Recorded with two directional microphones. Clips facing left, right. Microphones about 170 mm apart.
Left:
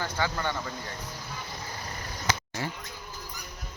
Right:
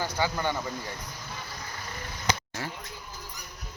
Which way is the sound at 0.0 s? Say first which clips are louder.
Right 2 dB; 15° right (ahead or behind).